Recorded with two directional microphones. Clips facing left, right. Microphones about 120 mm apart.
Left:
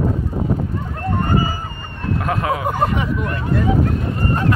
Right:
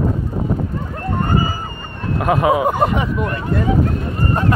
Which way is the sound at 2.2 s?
15° right (ahead or behind).